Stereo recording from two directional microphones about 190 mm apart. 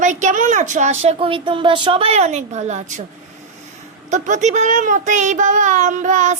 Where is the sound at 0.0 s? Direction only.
40° right (ahead or behind).